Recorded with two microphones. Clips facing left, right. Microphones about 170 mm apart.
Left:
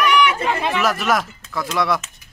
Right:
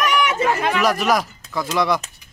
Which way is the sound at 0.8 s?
Centre (ahead or behind).